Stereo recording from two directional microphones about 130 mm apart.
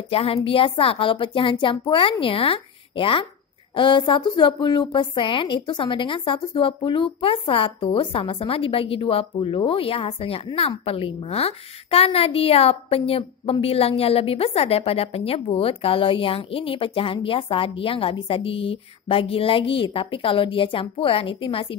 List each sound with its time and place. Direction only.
0.1 s a woman's voice: 50° left (ahead or behind)